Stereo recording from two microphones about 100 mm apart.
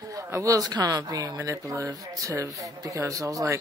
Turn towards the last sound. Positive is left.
turn(degrees=-35)  # may be behind; listen again after turning